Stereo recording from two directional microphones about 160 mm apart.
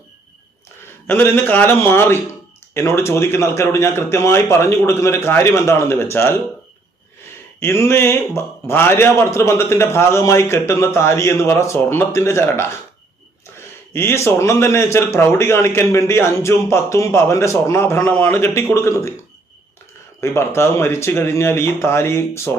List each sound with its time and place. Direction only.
1.0 s a man's voice: 10° left (ahead or behind)
7.6 s a man's voice: 15° left (ahead or behind)
13.9 s a man's voice: 15° left (ahead or behind)
20.2 s a man's voice: 15° left (ahead or behind)